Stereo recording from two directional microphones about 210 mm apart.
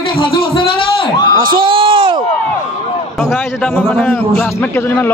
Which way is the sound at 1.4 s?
25° right (ahead or behind).